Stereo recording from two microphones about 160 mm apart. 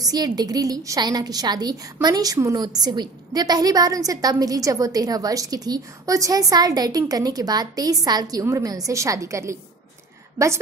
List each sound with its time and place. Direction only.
0.0 s a woman's voice: 25° right (ahead or behind)